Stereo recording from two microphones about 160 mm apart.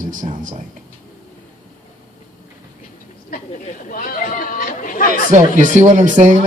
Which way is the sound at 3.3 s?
60° left (ahead or behind).